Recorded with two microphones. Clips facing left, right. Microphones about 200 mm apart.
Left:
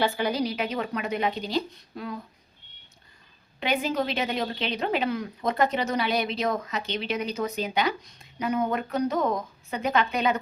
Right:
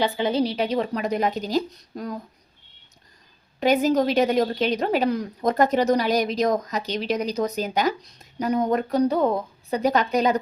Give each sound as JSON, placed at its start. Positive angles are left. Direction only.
{"t": 0.0, "sound": "a woman's voice", "side_deg": -20}
{"t": 3.6, "sound": "a woman's voice", "side_deg": -40}